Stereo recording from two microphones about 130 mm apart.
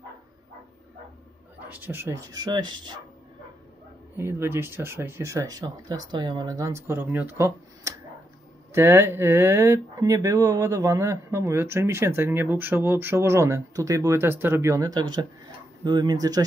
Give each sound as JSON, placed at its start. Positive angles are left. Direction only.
{"t": 1.7, "sound": "speech", "side_deg": -15}
{"t": 4.2, "sound": "speech", "side_deg": -20}